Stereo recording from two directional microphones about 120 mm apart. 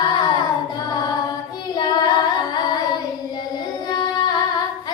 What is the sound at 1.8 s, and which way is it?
Child singing, 35° left (ahead or behind).